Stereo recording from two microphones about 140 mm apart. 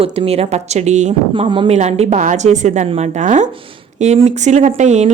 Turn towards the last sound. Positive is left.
turn(degrees=-55)  # may be behind; listen again after turning